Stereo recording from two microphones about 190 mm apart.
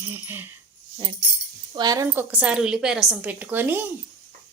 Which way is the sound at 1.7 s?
20° right (ahead or behind).